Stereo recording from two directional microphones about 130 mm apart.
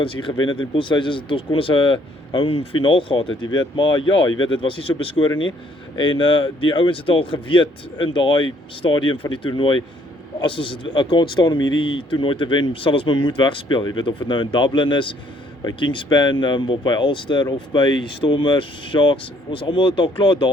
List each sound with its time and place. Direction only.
0.0 s speech: 40° left (ahead or behind)